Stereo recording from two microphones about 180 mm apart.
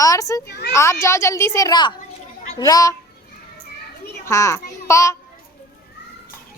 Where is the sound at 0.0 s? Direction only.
20° left (ahead or behind).